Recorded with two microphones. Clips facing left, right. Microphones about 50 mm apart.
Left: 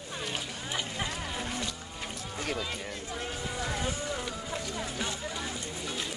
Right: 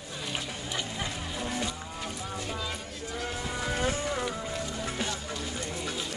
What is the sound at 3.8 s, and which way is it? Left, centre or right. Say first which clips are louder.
Music: right 4 dB; right.